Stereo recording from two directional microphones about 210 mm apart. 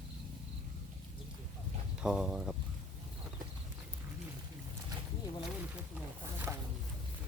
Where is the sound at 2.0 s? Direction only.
5° right (ahead or behind).